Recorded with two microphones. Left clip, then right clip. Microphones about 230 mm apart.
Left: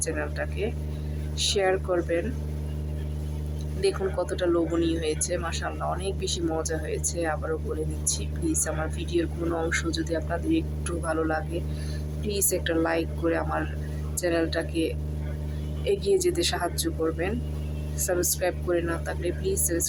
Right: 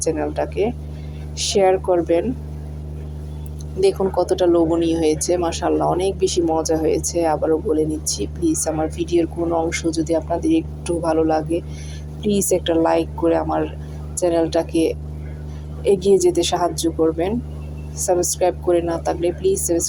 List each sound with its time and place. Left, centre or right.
0.0 s speech: centre
3.8 s speech: centre